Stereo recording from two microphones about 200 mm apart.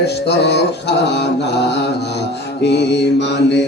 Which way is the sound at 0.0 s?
55° left (ahead or behind).